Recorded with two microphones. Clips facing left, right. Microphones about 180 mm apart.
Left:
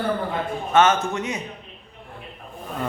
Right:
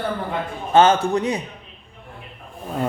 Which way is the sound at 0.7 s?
30° right (ahead or behind).